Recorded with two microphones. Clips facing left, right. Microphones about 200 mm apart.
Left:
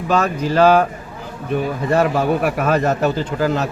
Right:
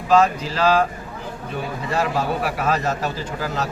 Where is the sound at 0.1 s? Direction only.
55° left (ahead or behind).